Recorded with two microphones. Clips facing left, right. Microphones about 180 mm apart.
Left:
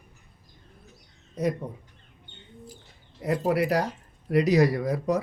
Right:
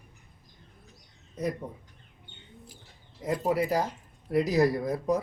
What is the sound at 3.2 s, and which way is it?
Speech, 70° left (ahead or behind).